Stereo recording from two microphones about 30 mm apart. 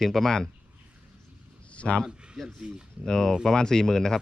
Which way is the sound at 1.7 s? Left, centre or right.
Left.